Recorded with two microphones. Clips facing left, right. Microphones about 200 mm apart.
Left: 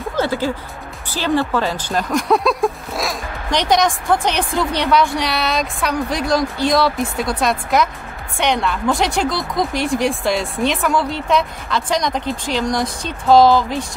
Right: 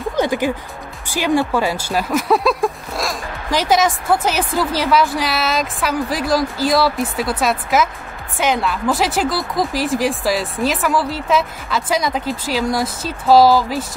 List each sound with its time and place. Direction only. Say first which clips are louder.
0.1 s speech: right 1 dB; 15° right (ahead or behind)